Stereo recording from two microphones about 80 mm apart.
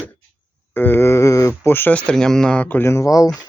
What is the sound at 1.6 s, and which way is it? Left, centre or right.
Speech, left.